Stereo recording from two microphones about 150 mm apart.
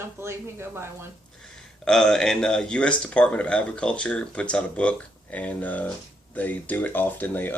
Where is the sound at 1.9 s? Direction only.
5° left (ahead or behind).